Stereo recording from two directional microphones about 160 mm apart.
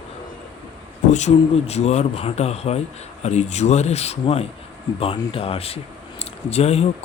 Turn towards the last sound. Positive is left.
turn(degrees=40)  # may be behind; listen again after turning